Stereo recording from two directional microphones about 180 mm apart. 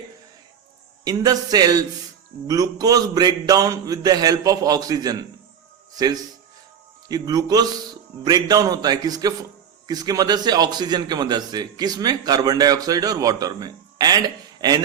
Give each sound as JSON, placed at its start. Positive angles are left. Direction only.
{"t": 1.0, "sound": "a man's voice", "side_deg": -20}
{"t": 7.1, "sound": "a man's voice", "side_deg": -20}